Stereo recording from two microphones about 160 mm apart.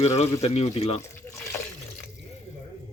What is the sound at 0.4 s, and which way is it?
Speech, 40° left (ahead or behind).